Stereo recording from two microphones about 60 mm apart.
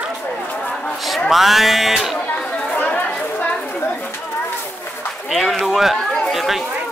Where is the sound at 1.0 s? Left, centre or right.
Centre.